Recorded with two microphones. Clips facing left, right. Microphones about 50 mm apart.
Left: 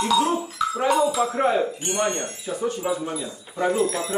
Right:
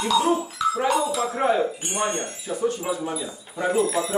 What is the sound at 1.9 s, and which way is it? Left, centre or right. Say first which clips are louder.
Wind chime: left 2 dB; centre.